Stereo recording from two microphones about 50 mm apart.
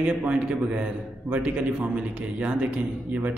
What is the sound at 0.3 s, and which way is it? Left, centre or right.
A man's voice, right.